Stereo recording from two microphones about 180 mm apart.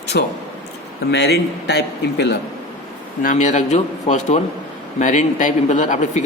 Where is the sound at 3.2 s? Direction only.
45° left (ahead or behind).